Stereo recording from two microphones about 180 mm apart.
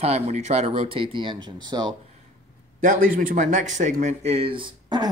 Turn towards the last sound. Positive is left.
turn(degrees=-25)  # may be behind; listen again after turning